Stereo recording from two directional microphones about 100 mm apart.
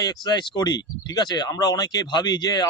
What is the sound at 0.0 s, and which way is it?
Speech, 45° left (ahead or behind).